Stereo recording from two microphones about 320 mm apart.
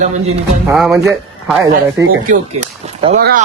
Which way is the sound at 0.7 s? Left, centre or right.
Centre.